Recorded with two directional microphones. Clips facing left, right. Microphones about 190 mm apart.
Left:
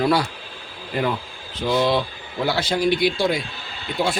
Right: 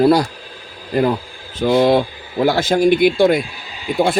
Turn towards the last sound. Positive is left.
turn(degrees=-15)  # may be behind; listen again after turning